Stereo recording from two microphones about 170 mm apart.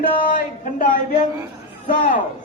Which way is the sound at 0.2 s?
50° left (ahead or behind).